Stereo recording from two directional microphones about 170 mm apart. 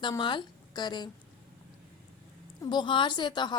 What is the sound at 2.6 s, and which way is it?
Speech, 25° left (ahead or behind).